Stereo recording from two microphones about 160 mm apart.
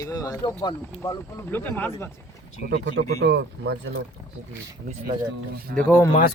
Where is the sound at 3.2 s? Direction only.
90° right.